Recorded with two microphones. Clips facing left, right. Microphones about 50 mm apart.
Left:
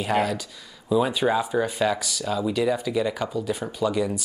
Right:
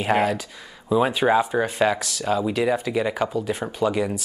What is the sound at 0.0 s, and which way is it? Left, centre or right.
Speech, right.